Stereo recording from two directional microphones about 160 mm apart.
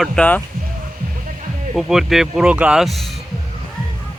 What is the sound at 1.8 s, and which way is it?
Speech, centre (ahead or behind).